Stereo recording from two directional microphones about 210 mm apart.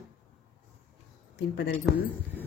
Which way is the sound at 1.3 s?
50° left (ahead or behind).